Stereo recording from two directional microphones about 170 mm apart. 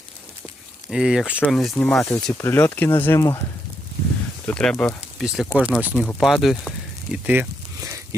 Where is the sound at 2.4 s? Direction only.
15° left (ahead or behind).